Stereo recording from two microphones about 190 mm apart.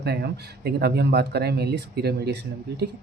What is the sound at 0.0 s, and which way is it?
Speech, 55° right (ahead or behind).